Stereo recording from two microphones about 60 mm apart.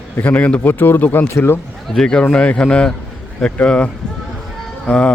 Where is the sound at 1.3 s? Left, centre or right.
Left.